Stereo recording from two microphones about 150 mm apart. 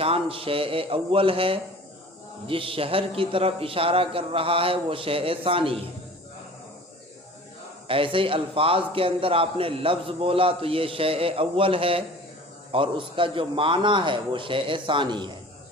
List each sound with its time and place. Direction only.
0.0 s a man's voice: 40° right (ahead or behind)
7.9 s a man's voice: 35° right (ahead or behind)